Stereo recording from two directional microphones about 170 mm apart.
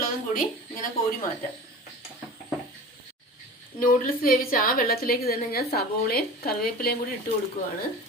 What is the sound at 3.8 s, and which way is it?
A woman's voice, 55° left (ahead or behind).